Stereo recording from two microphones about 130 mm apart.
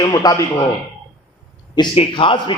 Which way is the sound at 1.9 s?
40° left (ahead or behind).